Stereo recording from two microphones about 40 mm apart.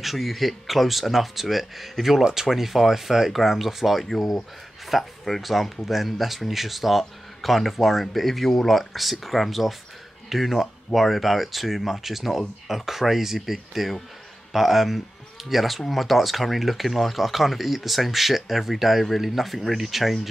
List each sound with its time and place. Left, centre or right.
0.0 s speech: centre